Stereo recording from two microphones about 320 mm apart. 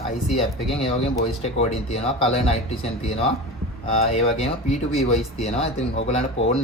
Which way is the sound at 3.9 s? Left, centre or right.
Centre.